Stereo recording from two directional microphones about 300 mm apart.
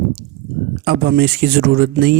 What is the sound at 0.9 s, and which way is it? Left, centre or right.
Speech, right.